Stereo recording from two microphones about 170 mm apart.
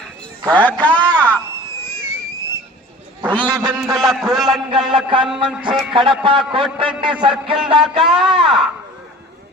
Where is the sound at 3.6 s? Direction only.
Centre (ahead or behind).